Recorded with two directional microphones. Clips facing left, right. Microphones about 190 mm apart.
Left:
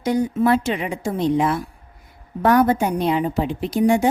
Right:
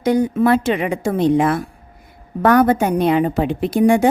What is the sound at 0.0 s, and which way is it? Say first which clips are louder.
A woman's voice: right 3 dB; 60° right (ahead or behind).